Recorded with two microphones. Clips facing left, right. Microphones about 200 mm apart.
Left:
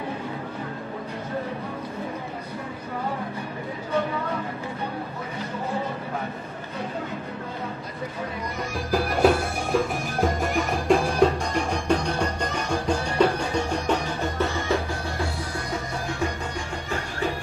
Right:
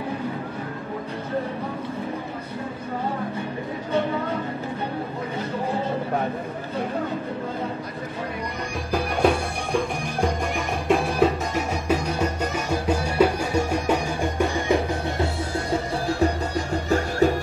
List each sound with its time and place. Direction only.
8.9 s music: centre (ahead or behind); by 15.6 s 20° right (ahead or behind)
16.1 s music: 35° right (ahead or behind)